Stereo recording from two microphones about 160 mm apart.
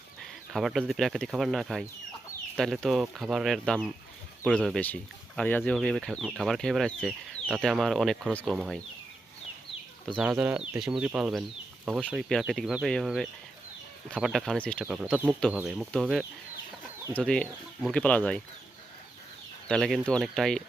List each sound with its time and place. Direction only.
0.2 s speech: centre (ahead or behind)
10.2 s speech: 5° right (ahead or behind)
14.8 s speech: 10° right (ahead or behind); by 18.4 s 10° left (ahead or behind)
19.6 s speech: centre (ahead or behind)